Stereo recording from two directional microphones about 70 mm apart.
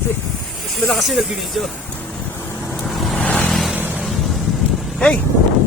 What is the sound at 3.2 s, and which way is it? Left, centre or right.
Vehicle, left.